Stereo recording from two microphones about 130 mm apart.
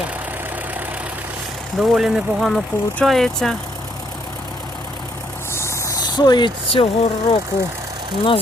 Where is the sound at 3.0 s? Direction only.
Centre (ahead or behind).